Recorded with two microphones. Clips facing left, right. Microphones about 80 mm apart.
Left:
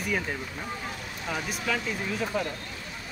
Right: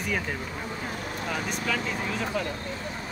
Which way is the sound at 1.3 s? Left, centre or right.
Centre.